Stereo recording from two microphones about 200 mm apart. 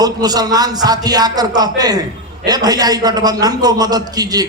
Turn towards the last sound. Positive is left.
turn(degrees=-20)  # may be behind; listen again after turning